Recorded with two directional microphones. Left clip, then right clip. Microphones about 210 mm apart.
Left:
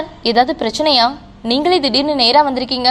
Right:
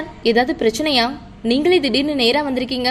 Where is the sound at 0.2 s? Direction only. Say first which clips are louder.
Left 2 dB; 5° left (ahead or behind).